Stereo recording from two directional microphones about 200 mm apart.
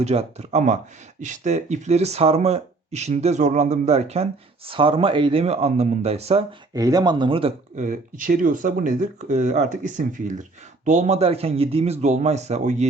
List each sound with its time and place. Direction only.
0.0 s speech: 30° right (ahead or behind)
6.7 s speech: 20° right (ahead or behind)
7.9 s speech: 40° right (ahead or behind)